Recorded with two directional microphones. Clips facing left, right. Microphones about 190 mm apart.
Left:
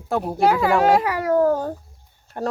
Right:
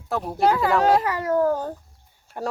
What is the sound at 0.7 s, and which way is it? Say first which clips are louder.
Babbling: left 2 dB; 10° left (ahead or behind).